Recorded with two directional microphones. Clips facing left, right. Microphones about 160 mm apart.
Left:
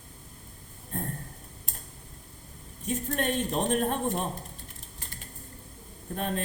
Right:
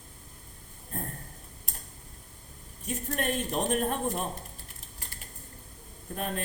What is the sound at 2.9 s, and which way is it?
Speech, 35° left (ahead or behind).